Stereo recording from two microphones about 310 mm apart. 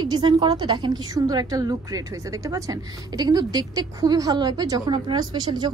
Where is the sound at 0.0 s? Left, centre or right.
Centre.